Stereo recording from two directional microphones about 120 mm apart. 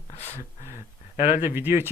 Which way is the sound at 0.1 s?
60° left (ahead or behind).